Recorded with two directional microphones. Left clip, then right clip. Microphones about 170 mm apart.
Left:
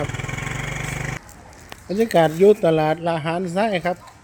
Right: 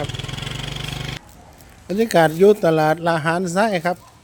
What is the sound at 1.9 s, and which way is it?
Speech, 15° right (ahead or behind).